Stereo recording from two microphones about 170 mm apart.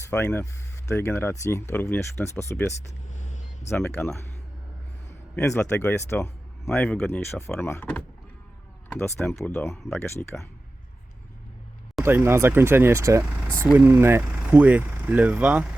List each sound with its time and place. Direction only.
0.1 s speech: 10° left (ahead or behind)
3.1 s vehicle: 45° left (ahead or behind)
3.8 s speech: 15° left (ahead or behind)
5.4 s speech: 15° left (ahead or behind)
12.0 s speech: 15° right (ahead or behind)